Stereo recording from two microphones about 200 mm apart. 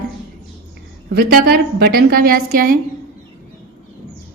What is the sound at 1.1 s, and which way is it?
A woman's voice, 50° right (ahead or behind).